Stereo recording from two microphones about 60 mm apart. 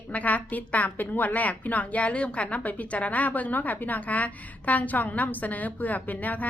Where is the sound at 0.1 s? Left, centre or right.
Left.